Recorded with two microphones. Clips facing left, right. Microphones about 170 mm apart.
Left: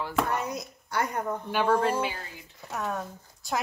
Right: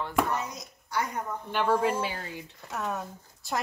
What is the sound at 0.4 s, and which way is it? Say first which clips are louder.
Speech: left 4 dB; 60° left (ahead or behind).